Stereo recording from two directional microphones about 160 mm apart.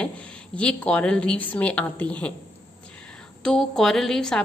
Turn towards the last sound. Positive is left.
turn(degrees=5)  # may be behind; listen again after turning